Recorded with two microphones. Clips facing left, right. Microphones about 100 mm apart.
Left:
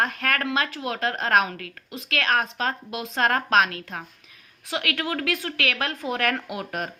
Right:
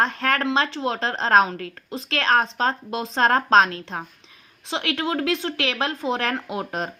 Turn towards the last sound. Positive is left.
turn(degrees=-25)  # may be behind; listen again after turning